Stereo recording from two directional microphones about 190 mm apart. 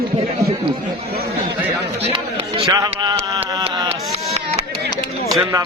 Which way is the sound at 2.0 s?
30° right (ahead or behind).